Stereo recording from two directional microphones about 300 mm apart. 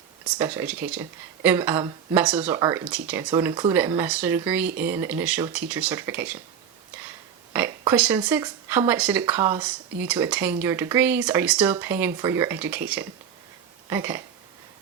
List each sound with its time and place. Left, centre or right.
0.3 s speech: centre
7.5 s speech: centre
13.9 s speech: centre